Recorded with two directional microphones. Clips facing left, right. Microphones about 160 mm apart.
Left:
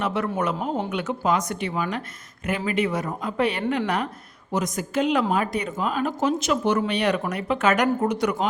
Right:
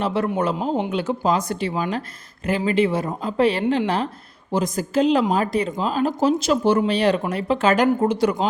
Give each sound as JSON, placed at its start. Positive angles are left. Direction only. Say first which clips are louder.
{"t": 0.0, "sound": "speech", "louder": "right 3 dB", "side_deg": -30}